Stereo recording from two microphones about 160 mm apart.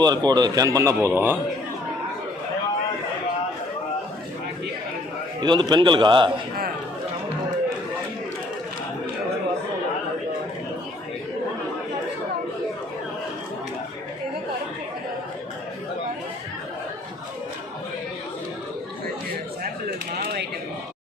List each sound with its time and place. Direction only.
0.0 s a man's voice: 25° right (ahead or behind)
5.4 s a man's voice: 25° right (ahead or behind)